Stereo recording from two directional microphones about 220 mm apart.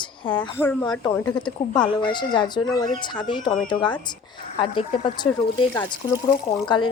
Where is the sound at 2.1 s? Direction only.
20° left (ahead or behind).